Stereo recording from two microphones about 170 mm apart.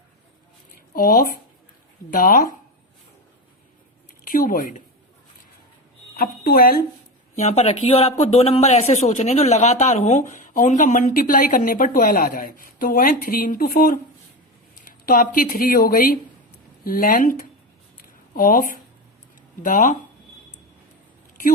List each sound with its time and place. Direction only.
0.9 s speech: 55° left (ahead or behind)
4.2 s a woman's voice: 55° left (ahead or behind)
6.1 s speech: 65° left (ahead or behind)
7.3 s speech: 40° left (ahead or behind); by 14.0 s 60° left (ahead or behind)
15.0 s speech: 55° left (ahead or behind)
18.3 s speech: 55° left (ahead or behind)